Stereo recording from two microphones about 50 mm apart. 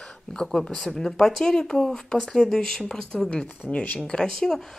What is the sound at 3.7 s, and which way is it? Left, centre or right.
Speech, left.